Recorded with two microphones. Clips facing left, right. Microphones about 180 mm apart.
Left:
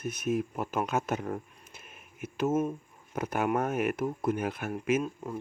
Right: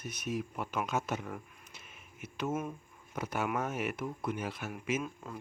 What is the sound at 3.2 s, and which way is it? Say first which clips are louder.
Speech: left 5 dB; 50° left (ahead or behind).